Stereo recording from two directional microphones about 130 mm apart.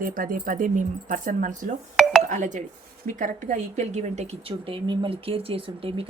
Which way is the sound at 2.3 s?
75° right (ahead or behind).